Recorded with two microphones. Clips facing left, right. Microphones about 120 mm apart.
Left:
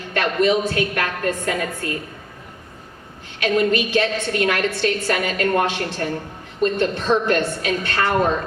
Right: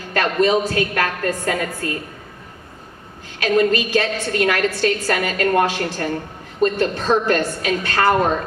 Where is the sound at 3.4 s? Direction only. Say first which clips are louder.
Right 2 dB; 40° right (ahead or behind).